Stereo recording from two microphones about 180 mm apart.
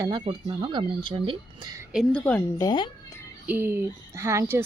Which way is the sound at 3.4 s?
10° right (ahead or behind).